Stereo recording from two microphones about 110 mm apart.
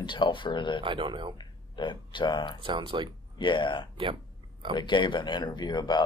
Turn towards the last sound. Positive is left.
turn(degrees=40)  # may be behind; listen again after turning